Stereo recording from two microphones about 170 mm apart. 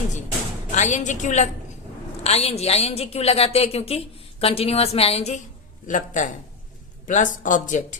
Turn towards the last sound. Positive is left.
turn(degrees=50)  # may be behind; listen again after turning